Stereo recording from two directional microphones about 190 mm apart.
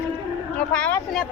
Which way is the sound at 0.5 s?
5° left (ahead or behind).